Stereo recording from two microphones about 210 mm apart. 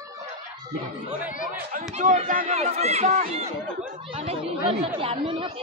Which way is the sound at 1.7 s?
40° right (ahead or behind).